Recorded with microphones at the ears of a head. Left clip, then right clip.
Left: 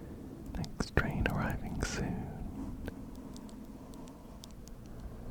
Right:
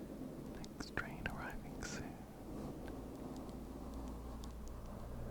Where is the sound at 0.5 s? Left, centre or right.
Left.